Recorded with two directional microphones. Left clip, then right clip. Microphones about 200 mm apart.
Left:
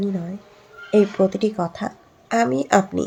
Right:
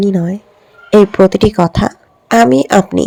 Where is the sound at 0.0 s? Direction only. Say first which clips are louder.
Right 12 dB; 45° right (ahead or behind).